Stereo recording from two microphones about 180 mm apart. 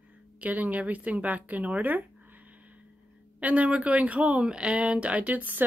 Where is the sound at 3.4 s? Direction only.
10° right (ahead or behind).